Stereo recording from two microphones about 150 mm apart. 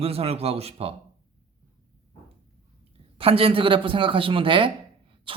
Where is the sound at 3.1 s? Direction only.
40° right (ahead or behind).